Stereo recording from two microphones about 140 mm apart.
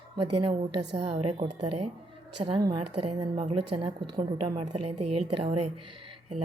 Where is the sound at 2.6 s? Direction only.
35° right (ahead or behind).